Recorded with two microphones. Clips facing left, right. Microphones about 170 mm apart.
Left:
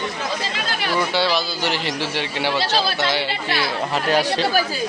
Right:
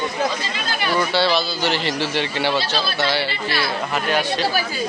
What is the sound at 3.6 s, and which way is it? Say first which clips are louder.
Speech: even; 30° left (ahead or behind).